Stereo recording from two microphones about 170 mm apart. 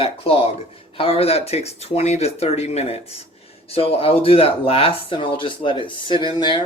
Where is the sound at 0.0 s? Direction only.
35° left (ahead or behind).